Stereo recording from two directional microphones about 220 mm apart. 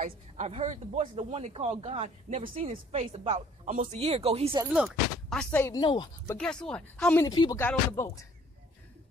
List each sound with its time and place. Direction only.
0.0 s speech: 30° right (ahead or behind)
4.7 s speech: centre (ahead or behind); by 6.3 s 20° left (ahead or behind)
6.3 s speech: 5° left (ahead or behind)